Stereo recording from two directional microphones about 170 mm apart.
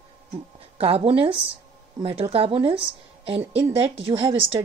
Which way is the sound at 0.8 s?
35° right (ahead or behind).